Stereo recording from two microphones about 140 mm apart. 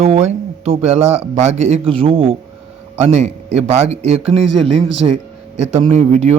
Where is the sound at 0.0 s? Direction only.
50° right (ahead or behind).